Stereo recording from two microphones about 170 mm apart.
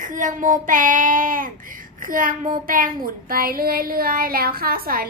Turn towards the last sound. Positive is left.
turn(degrees=-60)  # may be behind; listen again after turning